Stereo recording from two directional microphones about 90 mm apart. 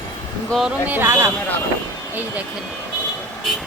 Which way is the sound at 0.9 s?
25° right (ahead or behind).